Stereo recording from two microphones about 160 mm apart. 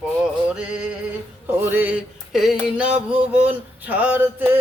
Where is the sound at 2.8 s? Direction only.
45° right (ahead or behind).